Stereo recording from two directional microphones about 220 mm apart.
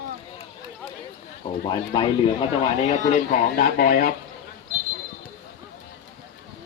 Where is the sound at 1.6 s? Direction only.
20° left (ahead or behind).